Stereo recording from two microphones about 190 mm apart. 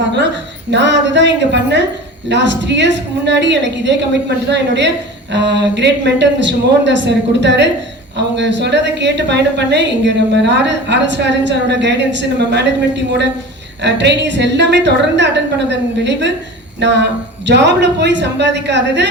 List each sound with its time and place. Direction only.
0.7 s a woman's voice: 65° right (ahead or behind)